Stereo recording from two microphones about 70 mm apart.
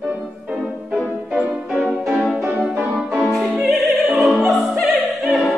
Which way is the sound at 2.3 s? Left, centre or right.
Right.